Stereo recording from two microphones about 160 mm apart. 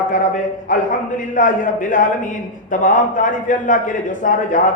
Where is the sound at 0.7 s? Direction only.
55° left (ahead or behind).